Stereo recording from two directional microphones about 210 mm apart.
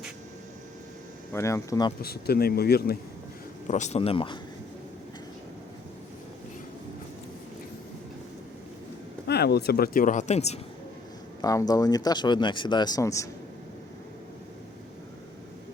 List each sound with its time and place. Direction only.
1.3 s speech: 15° left (ahead or behind)
2.0 s speech: 45° left (ahead or behind)
3.7 s speech: 35° left (ahead or behind)
9.2 s speech: 50° left (ahead or behind); by 10.6 s 30° left (ahead or behind)
11.4 s speech: 15° left (ahead or behind)